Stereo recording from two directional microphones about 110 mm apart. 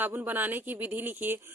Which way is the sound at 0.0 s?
15° right (ahead or behind).